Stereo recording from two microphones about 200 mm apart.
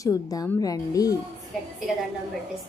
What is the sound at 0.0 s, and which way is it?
Speech, 20° left (ahead or behind).